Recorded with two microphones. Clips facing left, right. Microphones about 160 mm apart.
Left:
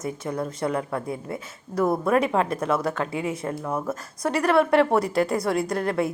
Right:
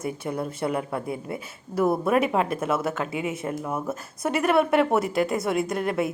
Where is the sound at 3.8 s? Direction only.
25° right (ahead or behind).